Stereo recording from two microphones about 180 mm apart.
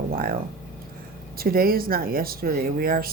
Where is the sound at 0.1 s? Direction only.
55° right (ahead or behind).